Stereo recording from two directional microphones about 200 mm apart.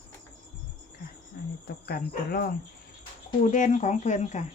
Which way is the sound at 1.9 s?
45° left (ahead or behind).